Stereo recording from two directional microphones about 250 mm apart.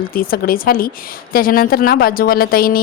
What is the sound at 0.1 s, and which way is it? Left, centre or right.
A woman's voice, left.